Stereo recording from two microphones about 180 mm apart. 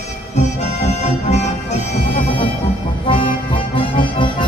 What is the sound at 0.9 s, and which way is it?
Music, 40° left (ahead or behind).